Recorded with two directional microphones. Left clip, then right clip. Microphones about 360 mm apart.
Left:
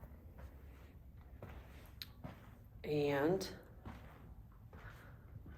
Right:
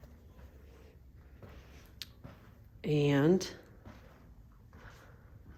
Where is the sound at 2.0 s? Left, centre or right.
Centre.